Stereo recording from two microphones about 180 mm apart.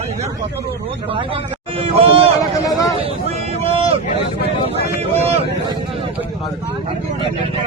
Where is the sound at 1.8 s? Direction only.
30° right (ahead or behind).